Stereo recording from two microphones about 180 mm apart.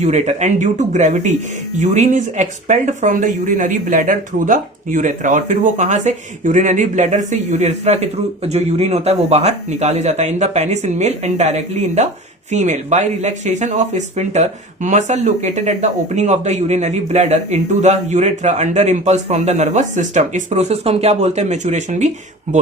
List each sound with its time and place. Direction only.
0.0 s speech: 40° right (ahead or behind)